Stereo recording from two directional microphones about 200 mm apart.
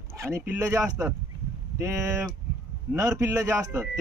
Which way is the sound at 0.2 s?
15° right (ahead or behind).